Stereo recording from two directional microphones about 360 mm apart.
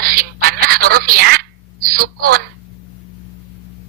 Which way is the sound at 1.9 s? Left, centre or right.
Right.